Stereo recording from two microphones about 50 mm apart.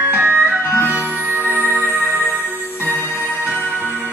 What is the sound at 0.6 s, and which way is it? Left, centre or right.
Music, left.